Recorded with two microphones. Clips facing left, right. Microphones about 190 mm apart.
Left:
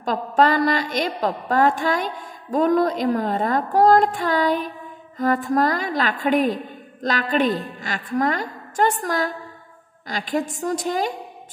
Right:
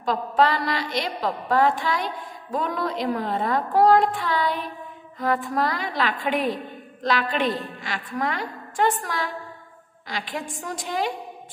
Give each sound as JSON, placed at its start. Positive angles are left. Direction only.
{"t": 0.0, "sound": "a woman's voice", "side_deg": 45}